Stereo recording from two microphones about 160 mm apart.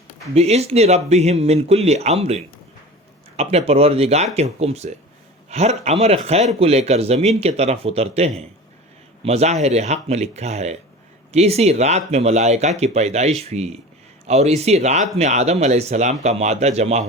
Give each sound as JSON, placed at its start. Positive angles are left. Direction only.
{"t": 0.3, "sound": "speech", "side_deg": -40}